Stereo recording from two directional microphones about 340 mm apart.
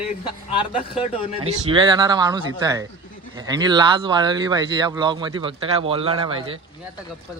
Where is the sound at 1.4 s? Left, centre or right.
Centre.